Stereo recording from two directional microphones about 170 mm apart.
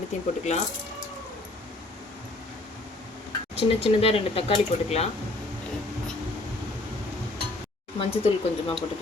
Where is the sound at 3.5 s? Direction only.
35° left (ahead or behind).